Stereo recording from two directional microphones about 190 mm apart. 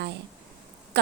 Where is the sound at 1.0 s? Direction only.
60° right (ahead or behind).